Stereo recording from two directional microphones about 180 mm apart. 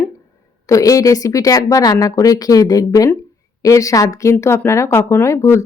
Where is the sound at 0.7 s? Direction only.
20° left (ahead or behind).